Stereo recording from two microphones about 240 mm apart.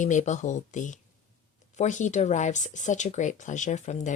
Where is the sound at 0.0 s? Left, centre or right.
Left.